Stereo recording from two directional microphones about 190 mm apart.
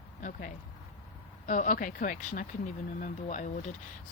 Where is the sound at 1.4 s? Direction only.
45° left (ahead or behind).